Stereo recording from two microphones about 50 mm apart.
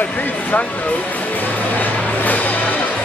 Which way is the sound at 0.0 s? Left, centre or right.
Left.